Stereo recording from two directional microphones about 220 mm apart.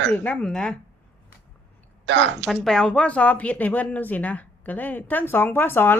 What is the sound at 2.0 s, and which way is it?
Speech, 55° right (ahead or behind).